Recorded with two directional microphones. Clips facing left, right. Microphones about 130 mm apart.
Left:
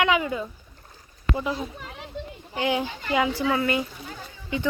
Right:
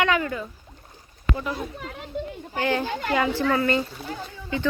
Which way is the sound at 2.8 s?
65° right (ahead or behind).